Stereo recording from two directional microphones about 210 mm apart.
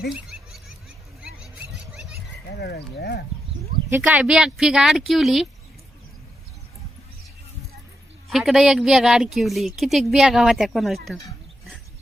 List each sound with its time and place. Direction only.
1.9 s a sound: 5° right (ahead or behind)
2.6 s speech: 50° left (ahead or behind)
3.8 s speech: 10° right (ahead or behind)
8.3 s speech: centre (ahead or behind)